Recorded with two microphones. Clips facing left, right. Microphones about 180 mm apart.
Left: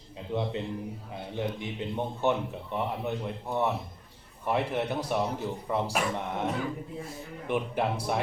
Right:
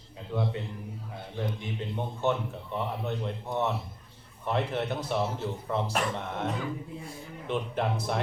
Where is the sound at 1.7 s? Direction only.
15° left (ahead or behind).